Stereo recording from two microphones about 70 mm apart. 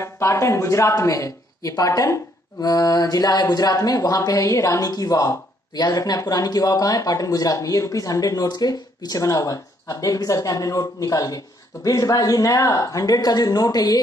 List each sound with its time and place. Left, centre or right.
0.0 s speech: left